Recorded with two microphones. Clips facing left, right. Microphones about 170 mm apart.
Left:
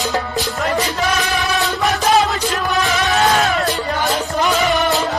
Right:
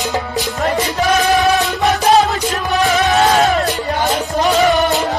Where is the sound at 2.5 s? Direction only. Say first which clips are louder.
Right 3 dB; 40° right (ahead or behind).